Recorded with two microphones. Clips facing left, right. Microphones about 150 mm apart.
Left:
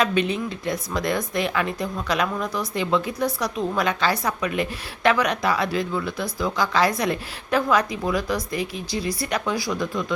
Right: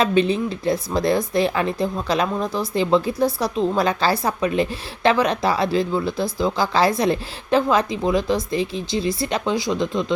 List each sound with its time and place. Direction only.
0.0 s speech: 30° right (ahead or behind)